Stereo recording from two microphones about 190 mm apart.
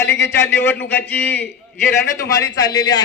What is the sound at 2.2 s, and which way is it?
Speech, 15° left (ahead or behind).